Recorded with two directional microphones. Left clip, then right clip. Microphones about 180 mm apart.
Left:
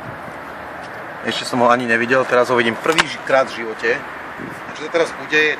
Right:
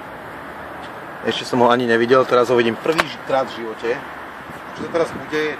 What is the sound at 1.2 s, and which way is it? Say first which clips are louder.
Speech: even; 30° right (ahead or behind).